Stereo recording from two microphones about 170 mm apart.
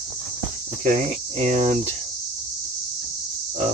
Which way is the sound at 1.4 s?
40° right (ahead or behind).